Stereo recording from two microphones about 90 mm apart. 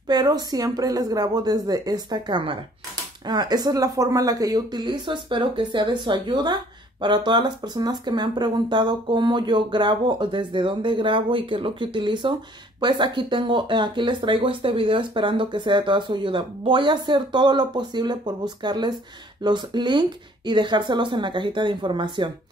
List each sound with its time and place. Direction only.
0.1 s a woman's voice: 45° right (ahead or behind)